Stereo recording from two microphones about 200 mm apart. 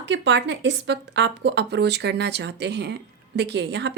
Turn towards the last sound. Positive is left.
turn(degrees=-60)  # may be behind; listen again after turning